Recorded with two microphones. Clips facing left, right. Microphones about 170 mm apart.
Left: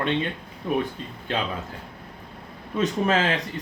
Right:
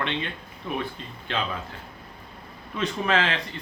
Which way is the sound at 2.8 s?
40° left (ahead or behind).